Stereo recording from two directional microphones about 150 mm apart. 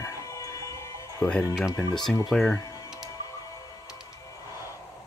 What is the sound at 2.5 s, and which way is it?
Music, 25° left (ahead or behind).